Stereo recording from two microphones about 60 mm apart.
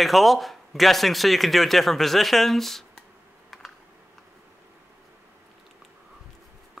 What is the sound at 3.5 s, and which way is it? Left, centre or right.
Computer keyboard, centre.